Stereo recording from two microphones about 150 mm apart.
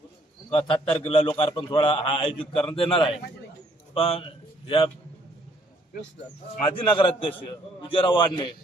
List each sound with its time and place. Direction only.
0.5 s a man's voice: 35° left (ahead or behind)
6.7 s a man's voice: 35° left (ahead or behind)